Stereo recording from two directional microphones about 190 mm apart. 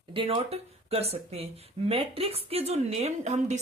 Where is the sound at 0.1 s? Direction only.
30° right (ahead or behind).